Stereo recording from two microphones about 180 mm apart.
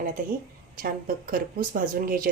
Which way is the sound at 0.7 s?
55° right (ahead or behind).